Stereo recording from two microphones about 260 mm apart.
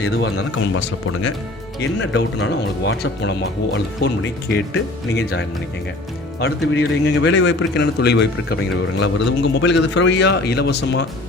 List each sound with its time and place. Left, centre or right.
0.0 s speech: left
1.8 s a man's voice: left
6.7 s a man's voice: left